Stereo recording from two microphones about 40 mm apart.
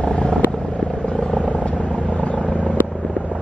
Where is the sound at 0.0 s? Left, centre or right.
Left.